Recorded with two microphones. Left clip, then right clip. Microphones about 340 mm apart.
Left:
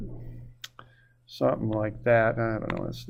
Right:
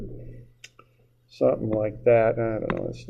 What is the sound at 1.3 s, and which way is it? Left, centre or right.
Speech, left.